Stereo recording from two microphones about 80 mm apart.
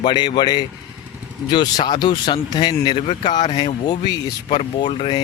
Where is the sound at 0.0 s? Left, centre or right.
Left.